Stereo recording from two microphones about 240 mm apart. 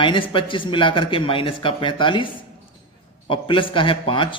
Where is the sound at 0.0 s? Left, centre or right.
Left.